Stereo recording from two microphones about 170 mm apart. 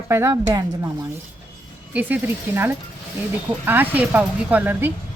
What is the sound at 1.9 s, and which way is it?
A woman's voice, 10° right (ahead or behind).